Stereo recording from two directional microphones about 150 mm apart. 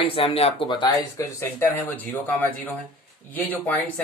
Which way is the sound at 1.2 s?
15° left (ahead or behind).